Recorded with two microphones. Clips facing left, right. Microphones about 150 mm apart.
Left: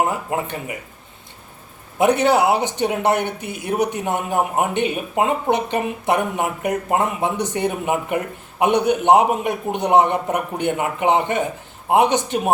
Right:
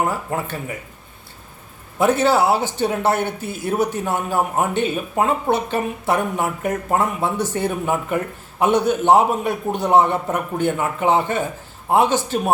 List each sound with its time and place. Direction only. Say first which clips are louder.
0.0 s speech: left 1 dB; 20° left (ahead or behind)
2.0 s speech: left 1 dB; 20° left (ahead or behind)